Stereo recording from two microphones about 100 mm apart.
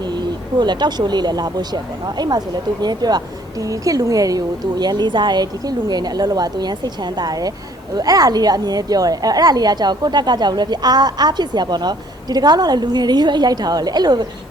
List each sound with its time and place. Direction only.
0.0 s a woman's voice: 45° right (ahead or behind)